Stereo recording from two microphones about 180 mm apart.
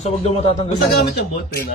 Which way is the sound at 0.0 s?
35° left (ahead or behind).